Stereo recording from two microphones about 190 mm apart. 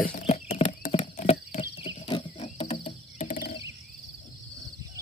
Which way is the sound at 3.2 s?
50° left (ahead or behind).